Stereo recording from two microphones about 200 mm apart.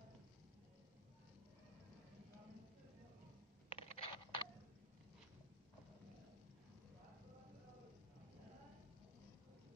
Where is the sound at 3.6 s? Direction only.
30° left (ahead or behind).